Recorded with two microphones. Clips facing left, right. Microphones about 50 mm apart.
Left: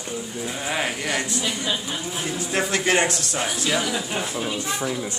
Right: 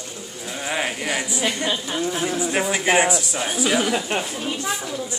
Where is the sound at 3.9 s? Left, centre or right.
Right.